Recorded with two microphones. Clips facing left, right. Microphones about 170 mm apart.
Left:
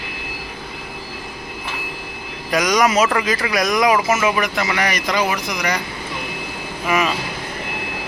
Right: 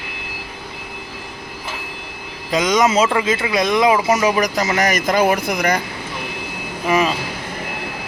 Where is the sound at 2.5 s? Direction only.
25° right (ahead or behind); by 5.8 s 50° right (ahead or behind).